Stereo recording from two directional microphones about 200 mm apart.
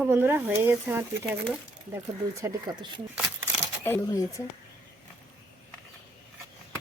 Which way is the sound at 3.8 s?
15° left (ahead or behind).